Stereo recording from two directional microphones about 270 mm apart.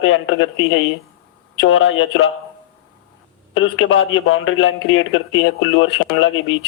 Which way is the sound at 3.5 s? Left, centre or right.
Left.